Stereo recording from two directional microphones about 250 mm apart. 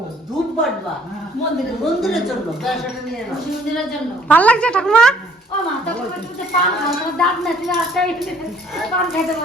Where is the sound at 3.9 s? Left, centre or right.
Centre.